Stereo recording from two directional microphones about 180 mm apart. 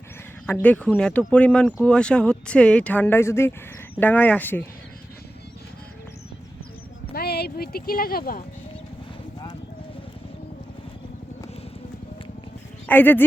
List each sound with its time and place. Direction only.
0.4 s speech: 10° left (ahead or behind)
7.1 s speech: 60° left (ahead or behind)
12.9 s speech: 10° left (ahead or behind)